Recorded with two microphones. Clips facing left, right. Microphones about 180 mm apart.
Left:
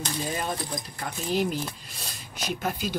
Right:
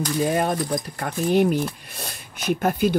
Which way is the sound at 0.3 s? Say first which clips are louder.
Right 9 dB; 60° right (ahead or behind).